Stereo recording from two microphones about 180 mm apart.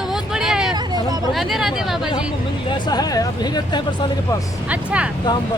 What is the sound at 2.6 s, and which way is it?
Speech, 25° left (ahead or behind).